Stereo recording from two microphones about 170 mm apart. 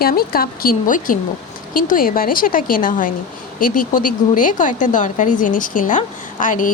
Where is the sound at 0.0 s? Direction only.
60° left (ahead or behind).